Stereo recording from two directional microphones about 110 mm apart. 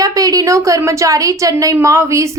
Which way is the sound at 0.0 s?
35° right (ahead or behind).